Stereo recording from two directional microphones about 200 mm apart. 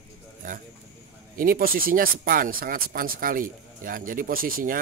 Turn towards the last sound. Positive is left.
turn(degrees=-45)  # may be behind; listen again after turning